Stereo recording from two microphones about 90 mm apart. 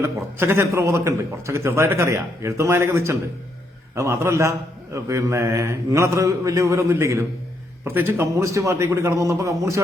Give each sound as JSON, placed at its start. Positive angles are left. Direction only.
{"t": 0.3, "sound": "a man's voice", "side_deg": -30}